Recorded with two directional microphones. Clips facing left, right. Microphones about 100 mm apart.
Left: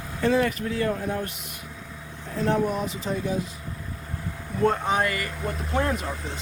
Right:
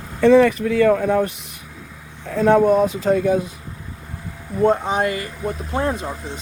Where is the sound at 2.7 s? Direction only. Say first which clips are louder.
Right 12 dB; 45° right (ahead or behind).